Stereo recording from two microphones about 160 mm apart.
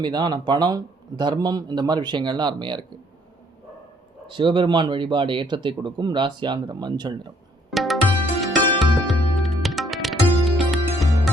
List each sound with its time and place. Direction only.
0.0 s speech: 25° right (ahead or behind)
4.3 s speech: 30° right (ahead or behind)
7.7 s music: centre (ahead or behind)